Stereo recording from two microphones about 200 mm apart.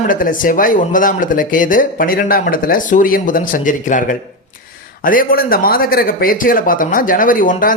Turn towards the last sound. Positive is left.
turn(degrees=45)  # may be behind; listen again after turning